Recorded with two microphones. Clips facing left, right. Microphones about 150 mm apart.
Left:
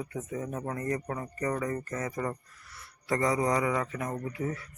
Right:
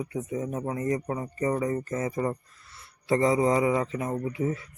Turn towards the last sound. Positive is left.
turn(degrees=-20)  # may be behind; listen again after turning